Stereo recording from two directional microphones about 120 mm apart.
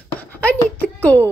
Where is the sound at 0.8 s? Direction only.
15° left (ahead or behind).